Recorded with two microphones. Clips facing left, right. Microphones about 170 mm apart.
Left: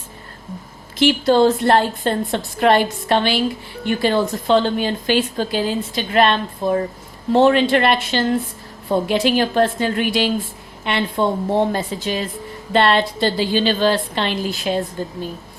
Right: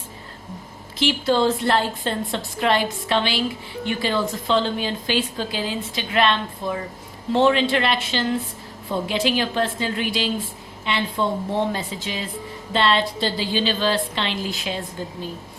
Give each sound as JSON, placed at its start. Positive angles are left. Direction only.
{"t": 1.2, "sound": "a woman's voice", "side_deg": 45}